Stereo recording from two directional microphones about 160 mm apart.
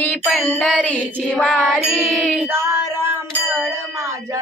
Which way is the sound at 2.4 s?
15° right (ahead or behind).